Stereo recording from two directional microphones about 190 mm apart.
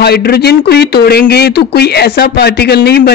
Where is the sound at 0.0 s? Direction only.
55° left (ahead or behind).